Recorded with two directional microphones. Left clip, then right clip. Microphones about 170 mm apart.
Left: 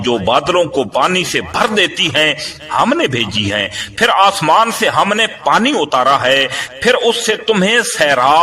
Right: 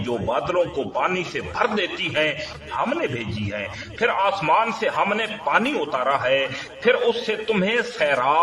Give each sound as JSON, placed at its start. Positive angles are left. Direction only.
{"t": 0.1, "sound": "a man's voice", "side_deg": 30}
{"t": 4.0, "sound": "a man's voice", "side_deg": 35}